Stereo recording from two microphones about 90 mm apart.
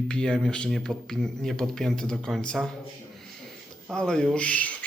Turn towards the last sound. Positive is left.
turn(degrees=15)  # may be behind; listen again after turning